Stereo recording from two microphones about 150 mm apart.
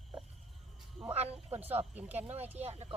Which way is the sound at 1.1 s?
45° right (ahead or behind).